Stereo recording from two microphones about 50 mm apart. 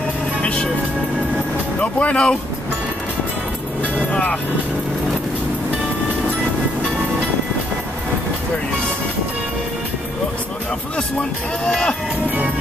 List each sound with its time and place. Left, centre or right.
0.4 s music: left
1.8 s speech: left
4.1 s vehicle: left
11.0 s speech: centre